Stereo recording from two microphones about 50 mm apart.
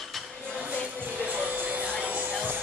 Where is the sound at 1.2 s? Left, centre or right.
Right.